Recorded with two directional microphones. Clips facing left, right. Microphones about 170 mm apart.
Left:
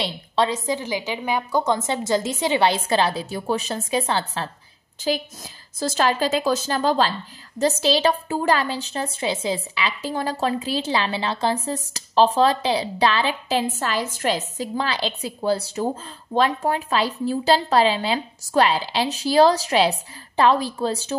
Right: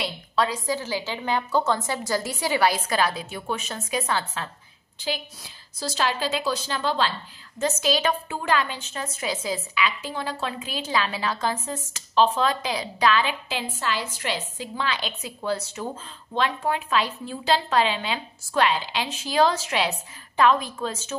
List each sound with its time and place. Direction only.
0.0 s a woman's voice: 25° left (ahead or behind)
5.0 s a woman's voice: 45° left (ahead or behind)